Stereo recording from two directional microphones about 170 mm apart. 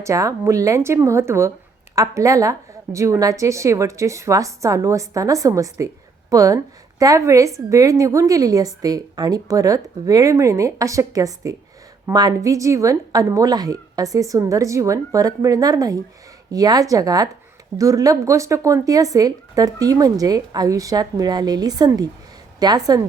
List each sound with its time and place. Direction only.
0.0 s speech: 20° right (ahead or behind)